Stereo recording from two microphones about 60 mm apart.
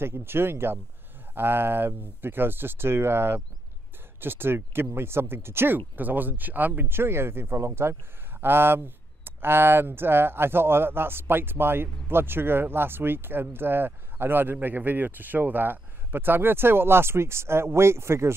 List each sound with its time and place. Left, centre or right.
0.0 s speech: right
5.9 s speech: right